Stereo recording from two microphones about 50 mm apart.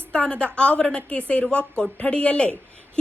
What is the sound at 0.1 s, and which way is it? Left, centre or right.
A woman's voice, left.